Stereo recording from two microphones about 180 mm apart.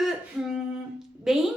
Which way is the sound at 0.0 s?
Centre (ahead or behind).